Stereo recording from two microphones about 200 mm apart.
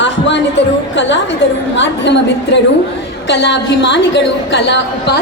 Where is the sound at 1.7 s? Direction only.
65° left (ahead or behind).